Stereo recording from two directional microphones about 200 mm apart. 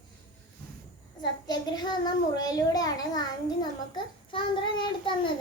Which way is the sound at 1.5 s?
20° left (ahead or behind).